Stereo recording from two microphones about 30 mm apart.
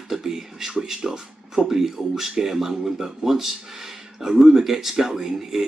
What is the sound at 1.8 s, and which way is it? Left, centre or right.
A man's voice, centre.